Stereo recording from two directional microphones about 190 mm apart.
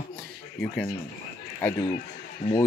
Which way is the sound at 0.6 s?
5° left (ahead or behind).